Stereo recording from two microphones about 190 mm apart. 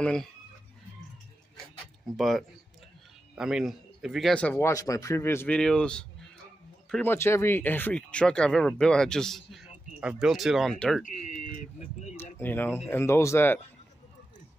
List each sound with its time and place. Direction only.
0.0 s speech: 5° left (ahead or behind)
2.1 s speech: centre (ahead or behind)
11.1 s speech: 45° left (ahead or behind)
12.4 s speech: 10° left (ahead or behind)